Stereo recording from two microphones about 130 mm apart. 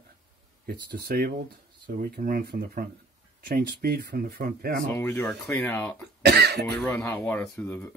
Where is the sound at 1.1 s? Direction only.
90° right.